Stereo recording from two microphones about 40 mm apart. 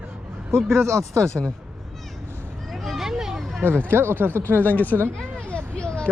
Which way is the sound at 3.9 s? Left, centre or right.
Right.